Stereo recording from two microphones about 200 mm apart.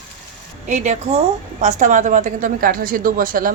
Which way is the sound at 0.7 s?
35° right (ahead or behind).